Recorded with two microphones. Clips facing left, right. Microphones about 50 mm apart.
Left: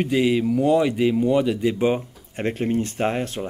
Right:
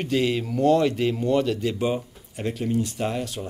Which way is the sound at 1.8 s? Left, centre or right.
Left.